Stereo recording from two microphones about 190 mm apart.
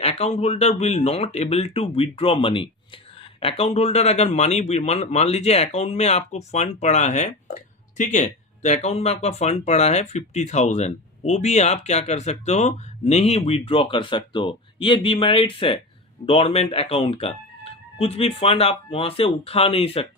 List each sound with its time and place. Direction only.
0.0 s speech: 30° left (ahead or behind)